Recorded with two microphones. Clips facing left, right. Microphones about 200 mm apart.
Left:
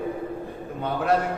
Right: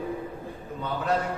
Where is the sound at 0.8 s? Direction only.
60° left (ahead or behind).